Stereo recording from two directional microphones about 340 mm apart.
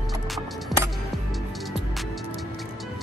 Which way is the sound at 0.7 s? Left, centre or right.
Centre.